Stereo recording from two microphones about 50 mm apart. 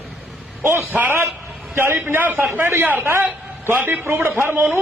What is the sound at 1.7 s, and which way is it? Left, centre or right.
A man's voice, right.